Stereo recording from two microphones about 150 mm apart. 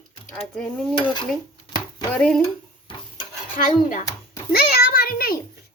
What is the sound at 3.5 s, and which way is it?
Speech, 60° left (ahead or behind).